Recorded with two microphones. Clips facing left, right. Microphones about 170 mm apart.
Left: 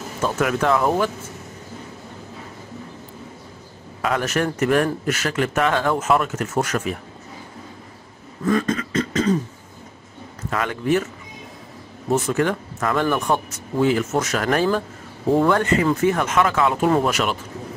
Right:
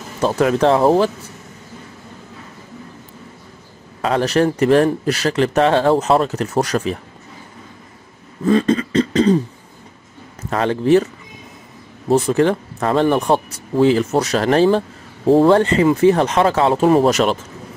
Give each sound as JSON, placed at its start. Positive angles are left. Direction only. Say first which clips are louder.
{"t": 0.2, "sound": "speech", "louder": "right 6 dB", "side_deg": -30}
{"t": 4.0, "sound": "speech", "louder": "right 6 dB", "side_deg": -30}
{"t": 8.5, "sound": "beatboxing", "louder": "right 6 dB", "side_deg": -30}
{"t": 10.5, "sound": "speech", "louder": "right 7 dB", "side_deg": -30}
{"t": 12.1, "sound": "speech", "louder": "right 5 dB", "side_deg": -30}